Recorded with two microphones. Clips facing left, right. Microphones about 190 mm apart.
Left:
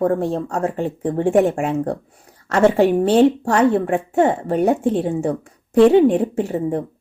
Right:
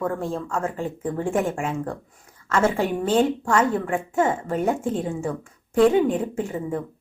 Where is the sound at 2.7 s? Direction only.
35° left (ahead or behind).